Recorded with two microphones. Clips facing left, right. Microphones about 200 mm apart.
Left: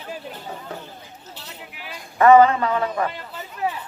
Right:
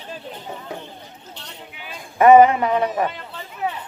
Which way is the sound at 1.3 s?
5° left (ahead or behind).